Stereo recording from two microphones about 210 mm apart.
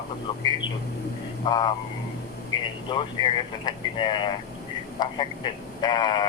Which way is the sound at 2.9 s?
20° left (ahead or behind).